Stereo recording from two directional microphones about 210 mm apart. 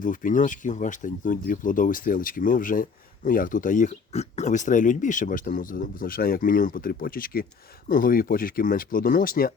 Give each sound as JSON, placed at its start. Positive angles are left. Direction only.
{"t": 0.0, "sound": "speech", "side_deg": 40}